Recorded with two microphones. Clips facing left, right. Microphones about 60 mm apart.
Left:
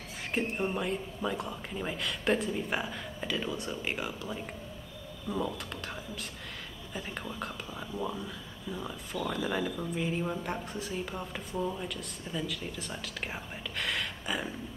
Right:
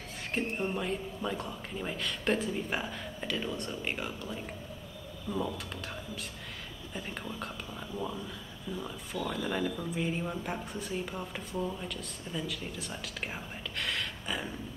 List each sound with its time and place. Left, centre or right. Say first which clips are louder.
0.3 s speech: left 1 dB; centre
6.9 s speech: left 1 dB; centre
8.7 s speech: left 1 dB; centre